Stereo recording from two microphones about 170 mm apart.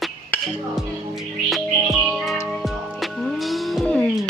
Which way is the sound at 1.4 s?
Centre (ahead or behind).